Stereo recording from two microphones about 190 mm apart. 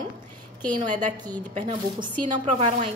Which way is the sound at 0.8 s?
40° right (ahead or behind).